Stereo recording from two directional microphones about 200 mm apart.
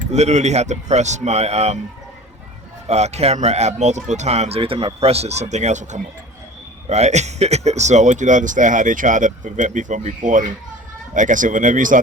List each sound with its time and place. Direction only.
0.1 s speech: 35° right (ahead or behind)
2.8 s speech: 35° right (ahead or behind)